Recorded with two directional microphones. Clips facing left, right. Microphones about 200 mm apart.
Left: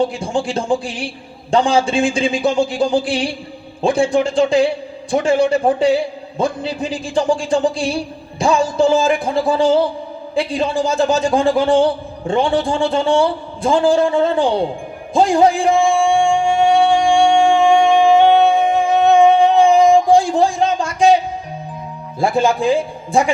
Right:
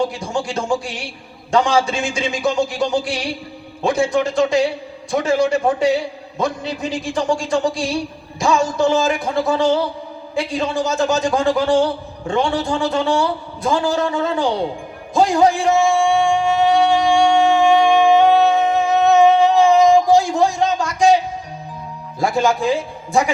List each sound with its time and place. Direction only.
0.0 s a man's voice: 30° left (ahead or behind)
15.1 s music: 30° left (ahead or behind)
22.2 s a man's voice: 30° left (ahead or behind)